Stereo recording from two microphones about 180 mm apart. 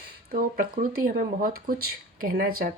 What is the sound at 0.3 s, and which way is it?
Speech, 55° right (ahead or behind).